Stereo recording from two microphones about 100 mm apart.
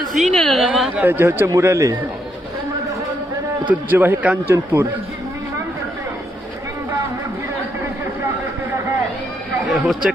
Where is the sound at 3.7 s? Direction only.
20° right (ahead or behind).